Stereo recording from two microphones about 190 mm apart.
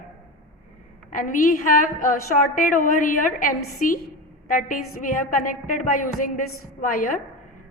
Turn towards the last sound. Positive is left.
turn(degrees=45)  # may be behind; listen again after turning